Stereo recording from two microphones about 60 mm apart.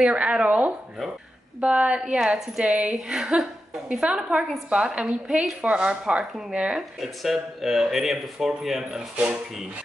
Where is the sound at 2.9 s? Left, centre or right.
Centre.